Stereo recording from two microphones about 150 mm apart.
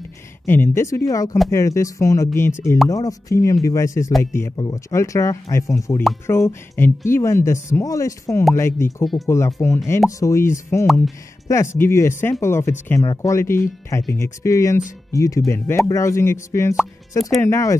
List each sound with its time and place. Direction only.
0.5 s speech: 15° left (ahead or behind)